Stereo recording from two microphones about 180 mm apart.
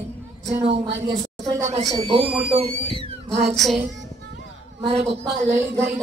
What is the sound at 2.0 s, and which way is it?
Speech, 30° right (ahead or behind).